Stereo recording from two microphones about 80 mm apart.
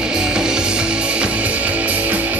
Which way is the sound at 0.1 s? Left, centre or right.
Centre.